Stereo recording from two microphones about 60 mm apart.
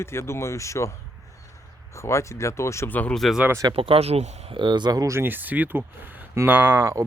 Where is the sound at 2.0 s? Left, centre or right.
Left.